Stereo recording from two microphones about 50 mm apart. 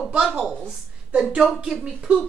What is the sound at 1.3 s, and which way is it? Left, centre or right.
Speech, centre.